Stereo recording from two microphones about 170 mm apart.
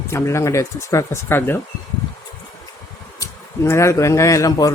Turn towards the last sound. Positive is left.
turn(degrees=20)  # may be behind; listen again after turning